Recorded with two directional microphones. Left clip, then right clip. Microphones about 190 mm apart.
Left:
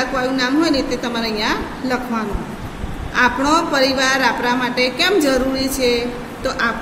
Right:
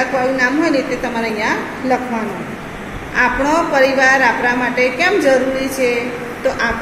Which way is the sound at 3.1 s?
65° left (ahead or behind).